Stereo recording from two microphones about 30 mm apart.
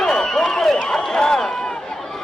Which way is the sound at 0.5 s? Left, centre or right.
Centre.